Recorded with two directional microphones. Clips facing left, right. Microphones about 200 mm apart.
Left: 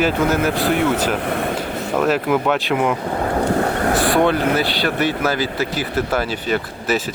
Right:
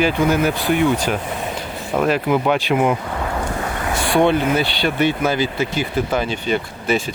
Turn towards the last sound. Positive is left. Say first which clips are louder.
# even
turn(degrees=5)  # may be behind; listen again after turning